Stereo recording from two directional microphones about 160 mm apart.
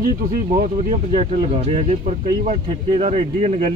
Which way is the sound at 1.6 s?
40° right (ahead or behind).